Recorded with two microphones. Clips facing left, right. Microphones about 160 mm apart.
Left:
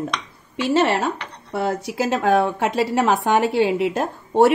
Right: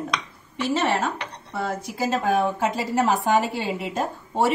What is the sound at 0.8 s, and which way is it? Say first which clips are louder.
A woman's voice: left 2 dB; 75° left (ahead or behind).